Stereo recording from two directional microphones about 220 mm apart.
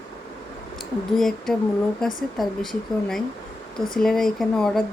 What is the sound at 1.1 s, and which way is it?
A woman's voice, centre (ahead or behind).